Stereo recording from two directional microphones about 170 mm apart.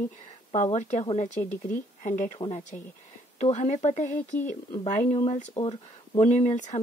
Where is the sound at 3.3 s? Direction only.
40° left (ahead or behind).